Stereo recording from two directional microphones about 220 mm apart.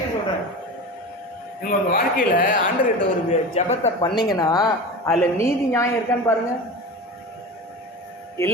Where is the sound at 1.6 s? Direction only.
40° left (ahead or behind).